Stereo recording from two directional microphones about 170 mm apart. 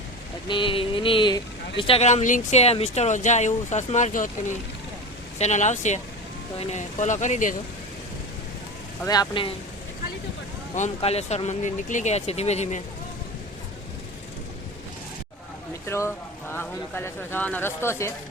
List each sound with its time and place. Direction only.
0.4 s speech: 30° left (ahead or behind); by 4.3 s 45° left (ahead or behind)
5.4 s speech: 45° left (ahead or behind)
9.0 s speech: 25° left (ahead or behind)
10.8 s speech: 40° left (ahead or behind)
15.9 s speech: 15° left (ahead or behind)